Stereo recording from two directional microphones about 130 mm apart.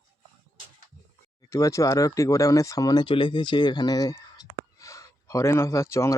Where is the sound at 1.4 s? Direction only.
25° left (ahead or behind).